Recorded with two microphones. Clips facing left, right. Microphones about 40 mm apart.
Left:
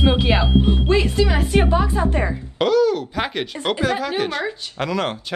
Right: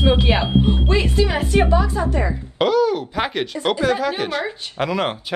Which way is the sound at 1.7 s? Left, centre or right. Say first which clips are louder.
Right 1 dB; left.